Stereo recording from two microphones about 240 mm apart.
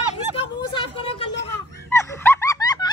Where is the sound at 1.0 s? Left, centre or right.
Left.